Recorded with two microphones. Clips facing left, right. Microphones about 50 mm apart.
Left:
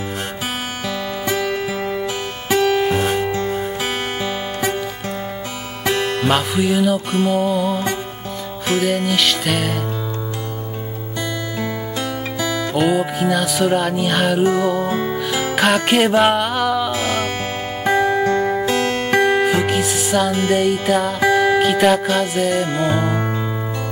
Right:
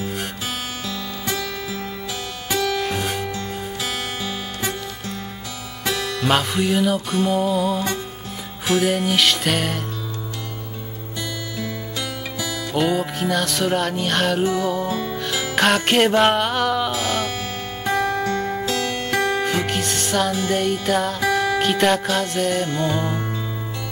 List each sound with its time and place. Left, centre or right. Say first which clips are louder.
1.3 s music: left 7 dB; centre
5.9 s music: left 5 dB; left
6.2 s music: even; centre
7.6 s music: left 2 dB; left
8.7 s music: left 1 dB; centre
11.5 s music: left 5 dB; left
12.7 s music: left 2 dB; centre
14.9 s music: left 4 dB; left
15.1 s music: left 3 dB; centre
17.8 s music: left 5 dB; left
18.9 s music: left 5 dB; left
19.1 s music: left 6 dB; left
19.4 s music: left 5 dB; centre
22.7 s music: left 4 dB; left